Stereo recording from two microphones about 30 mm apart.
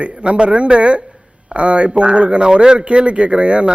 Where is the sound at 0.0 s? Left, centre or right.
Right.